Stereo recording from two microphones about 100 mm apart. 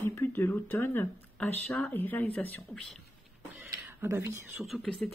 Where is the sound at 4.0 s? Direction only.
25° right (ahead or behind).